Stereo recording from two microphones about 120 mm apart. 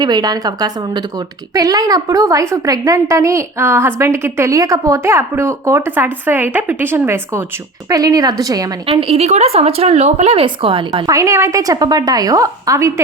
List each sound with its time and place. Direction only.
0.0 s a woman's voice: 35° right (ahead or behind)
7.9 s a woman's voice: 30° right (ahead or behind)
8.9 s a woman's voice: 55° right (ahead or behind)
10.4 s a woman's voice: 45° right (ahead or behind); by 12.9 s 25° right (ahead or behind)